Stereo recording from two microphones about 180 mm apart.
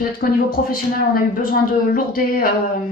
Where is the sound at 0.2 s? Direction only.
55° left (ahead or behind).